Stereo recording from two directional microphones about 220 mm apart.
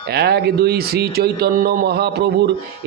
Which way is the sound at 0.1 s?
50° right (ahead or behind).